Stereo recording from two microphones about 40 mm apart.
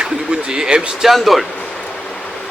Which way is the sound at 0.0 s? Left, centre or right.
Right.